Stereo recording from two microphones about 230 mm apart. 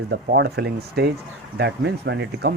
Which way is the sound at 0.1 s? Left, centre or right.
Right.